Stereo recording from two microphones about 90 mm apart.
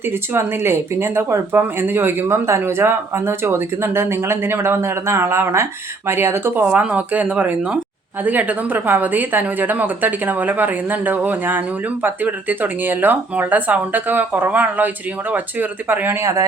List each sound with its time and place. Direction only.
0.1 s speech: 30° right (ahead or behind)
6.7 s speech: 15° right (ahead or behind)
16.2 s speech: 40° right (ahead or behind)